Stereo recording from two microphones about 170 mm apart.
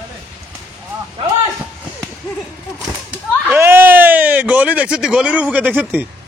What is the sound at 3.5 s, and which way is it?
Speech, 15° right (ahead or behind).